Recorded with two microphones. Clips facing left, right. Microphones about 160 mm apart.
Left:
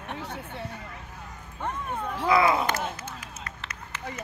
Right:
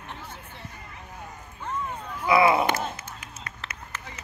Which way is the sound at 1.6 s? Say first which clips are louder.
Left 2 dB; 60° left (ahead or behind).